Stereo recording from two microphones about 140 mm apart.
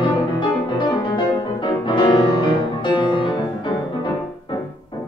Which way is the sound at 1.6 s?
35° left (ahead or behind).